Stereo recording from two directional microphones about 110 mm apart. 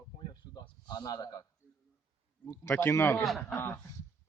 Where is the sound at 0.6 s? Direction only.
40° left (ahead or behind).